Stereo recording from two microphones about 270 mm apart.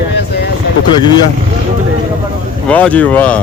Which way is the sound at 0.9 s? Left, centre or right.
Centre.